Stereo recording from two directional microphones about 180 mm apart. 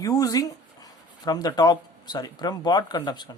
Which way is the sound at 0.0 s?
20° left (ahead or behind).